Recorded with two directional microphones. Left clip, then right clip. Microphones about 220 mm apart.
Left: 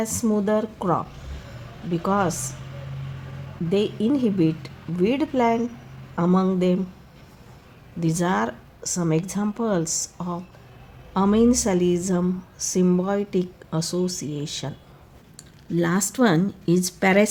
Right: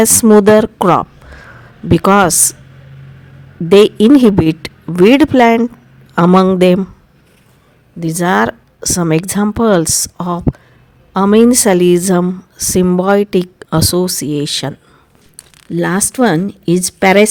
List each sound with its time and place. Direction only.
0.0 s a woman's voice: 40° right (ahead or behind)
3.7 s a woman's voice: 40° right (ahead or behind)
7.9 s a woman's voice: 30° right (ahead or behind)